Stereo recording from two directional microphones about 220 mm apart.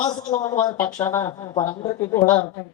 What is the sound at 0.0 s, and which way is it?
A woman's voice, 20° left (ahead or behind).